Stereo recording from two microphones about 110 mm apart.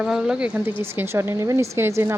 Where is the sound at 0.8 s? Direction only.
20° right (ahead or behind).